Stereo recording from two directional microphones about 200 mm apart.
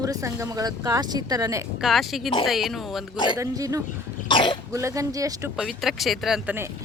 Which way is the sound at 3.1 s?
25° left (ahead or behind).